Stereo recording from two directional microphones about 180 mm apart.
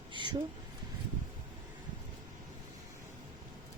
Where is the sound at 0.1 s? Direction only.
25° right (ahead or behind).